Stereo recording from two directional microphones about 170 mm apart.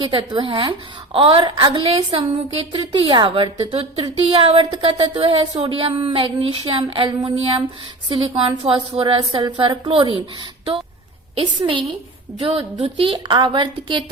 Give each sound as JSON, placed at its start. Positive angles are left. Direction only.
{"t": 0.1, "sound": "a woman's voice", "side_deg": -30}
{"t": 11.3, "sound": "a woman's voice", "side_deg": -30}